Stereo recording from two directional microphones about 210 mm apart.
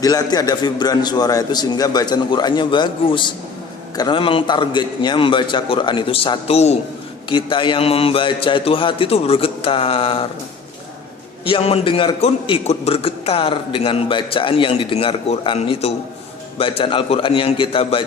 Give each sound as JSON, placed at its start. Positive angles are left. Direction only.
{"t": 0.0, "sound": "a man's voice", "side_deg": 20}
{"t": 11.4, "sound": "a man's voice", "side_deg": 25}